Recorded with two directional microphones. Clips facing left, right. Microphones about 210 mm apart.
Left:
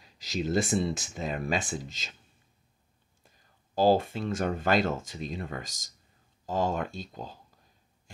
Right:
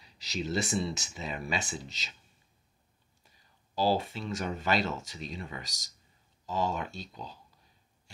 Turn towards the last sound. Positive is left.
turn(degrees=50)  # may be behind; listen again after turning